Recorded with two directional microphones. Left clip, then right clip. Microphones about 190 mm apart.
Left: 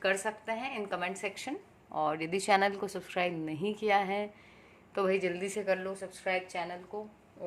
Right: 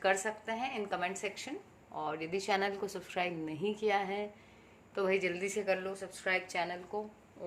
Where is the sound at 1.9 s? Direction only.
35° left (ahead or behind); by 7.0 s 5° right (ahead or behind).